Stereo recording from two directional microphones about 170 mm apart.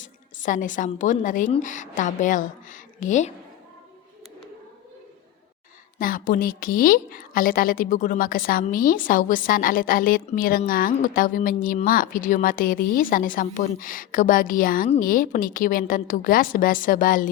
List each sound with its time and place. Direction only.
0.0 s a woman's voice: 50° left (ahead or behind)
6.0 s a woman's voice: 55° left (ahead or behind)